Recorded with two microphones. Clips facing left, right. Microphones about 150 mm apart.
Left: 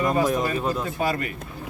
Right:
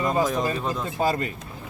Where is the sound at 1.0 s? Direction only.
30° right (ahead or behind).